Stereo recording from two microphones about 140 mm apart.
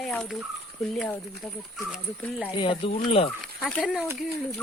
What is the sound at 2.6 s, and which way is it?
Speech, 40° left (ahead or behind).